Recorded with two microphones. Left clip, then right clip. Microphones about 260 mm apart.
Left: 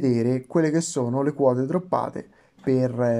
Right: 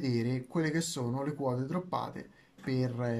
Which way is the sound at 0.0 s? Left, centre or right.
Left.